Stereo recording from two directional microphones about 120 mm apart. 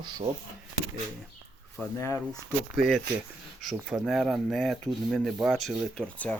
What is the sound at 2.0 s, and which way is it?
Speech, 25° left (ahead or behind).